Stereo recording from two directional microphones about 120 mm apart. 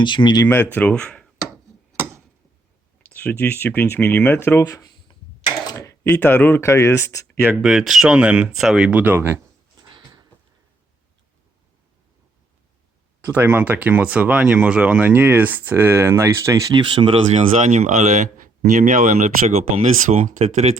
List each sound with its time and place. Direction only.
0.0 s speech: 40° left (ahead or behind)
0.4 s speech: 15° left (ahead or behind)
3.0 s speech: 15° left (ahead or behind); by 5.5 s 35° left (ahead or behind)
5.6 s typing: 25° left (ahead or behind)
6.1 s speech: 15° left (ahead or behind)
7.6 s speech: centre (ahead or behind); by 9.4 s 20° right (ahead or behind)
13.2 s speech: 15° right (ahead or behind)
16.8 s speech: 45° right (ahead or behind)
17.6 s speech: 90° right; by 20.7 s 65° right (ahead or behind)